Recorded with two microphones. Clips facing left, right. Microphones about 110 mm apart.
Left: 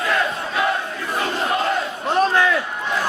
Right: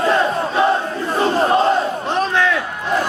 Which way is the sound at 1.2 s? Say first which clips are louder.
Right 7 dB; 30° right (ahead or behind).